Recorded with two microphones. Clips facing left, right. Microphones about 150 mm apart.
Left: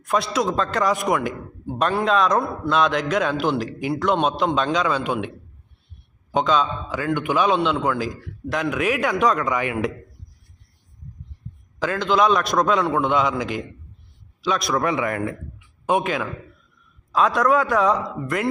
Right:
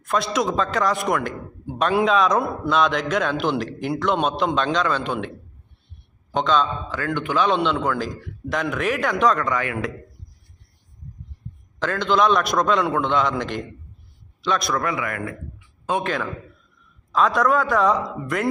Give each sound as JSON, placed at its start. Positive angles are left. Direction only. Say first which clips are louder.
{"t": 0.1, "sound": "a man's voice", "louder": "even", "side_deg": 0}
{"t": 6.3, "sound": "a man's voice", "louder": "even", "side_deg": 5}
{"t": 11.8, "sound": "a man's voice", "louder": "even", "side_deg": 5}
{"t": 14.8, "sound": "speech", "louder": "left 3 dB", "side_deg": 25}
{"t": 15.5, "sound": "a sound", "louder": "left 3 dB", "side_deg": 15}
{"t": 17.1, "sound": "a man's voice", "louder": "left 1 dB", "side_deg": 5}